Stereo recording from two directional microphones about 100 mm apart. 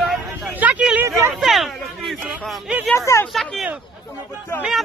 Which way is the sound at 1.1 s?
30° right (ahead or behind).